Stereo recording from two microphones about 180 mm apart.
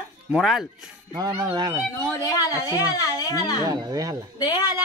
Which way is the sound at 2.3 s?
20° left (ahead or behind).